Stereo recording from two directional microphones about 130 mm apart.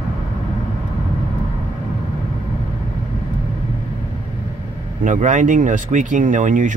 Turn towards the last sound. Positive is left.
turn(degrees=-80)